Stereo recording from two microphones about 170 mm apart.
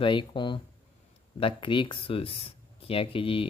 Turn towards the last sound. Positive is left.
turn(degrees=30)  # may be behind; listen again after turning